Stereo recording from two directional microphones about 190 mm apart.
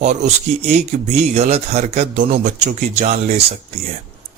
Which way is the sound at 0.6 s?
35° right (ahead or behind).